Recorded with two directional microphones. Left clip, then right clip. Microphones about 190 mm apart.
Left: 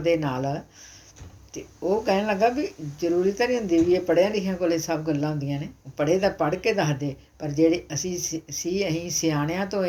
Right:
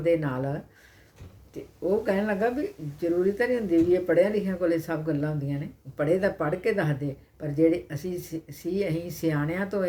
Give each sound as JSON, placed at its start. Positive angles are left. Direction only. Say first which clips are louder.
{"t": 0.0, "sound": "speech", "louder": "left 2 dB", "side_deg": -10}
{"t": 1.9, "sound": "speech", "louder": "left 3 dB", "side_deg": -10}